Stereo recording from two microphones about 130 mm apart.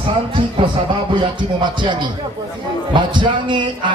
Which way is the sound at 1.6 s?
35° right (ahead or behind).